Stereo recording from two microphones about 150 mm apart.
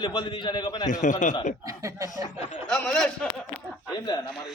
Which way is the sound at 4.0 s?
30° left (ahead or behind).